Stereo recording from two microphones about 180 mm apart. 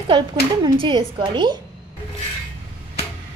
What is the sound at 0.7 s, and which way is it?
Speech, 25° right (ahead or behind).